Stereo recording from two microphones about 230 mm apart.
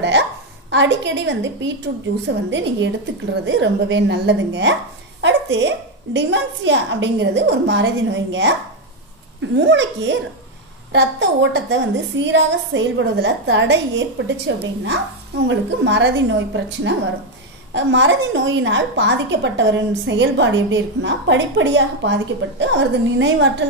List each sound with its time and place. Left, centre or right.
0.0 s a sound: right
2.2 s a woman's voice: right
17.7 s a woman's voice: right